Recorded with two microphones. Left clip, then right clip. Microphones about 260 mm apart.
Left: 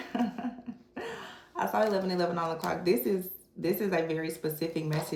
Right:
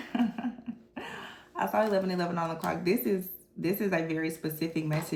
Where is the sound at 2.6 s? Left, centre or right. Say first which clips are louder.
Left 1 dB; centre.